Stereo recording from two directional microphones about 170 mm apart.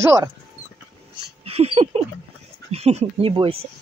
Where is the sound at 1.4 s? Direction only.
35° right (ahead or behind).